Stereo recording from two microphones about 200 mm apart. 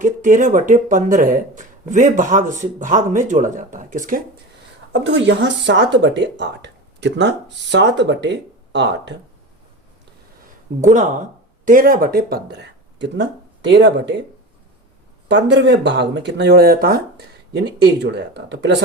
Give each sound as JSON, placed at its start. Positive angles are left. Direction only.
{"t": 0.0, "sound": "speech", "side_deg": -40}
{"t": 4.9, "sound": "speech", "side_deg": -65}
{"t": 10.8, "sound": "speech", "side_deg": -40}
{"t": 15.3, "sound": "speech", "side_deg": -60}